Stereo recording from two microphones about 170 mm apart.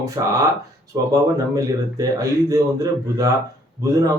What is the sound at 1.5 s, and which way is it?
Speech, 20° right (ahead or behind).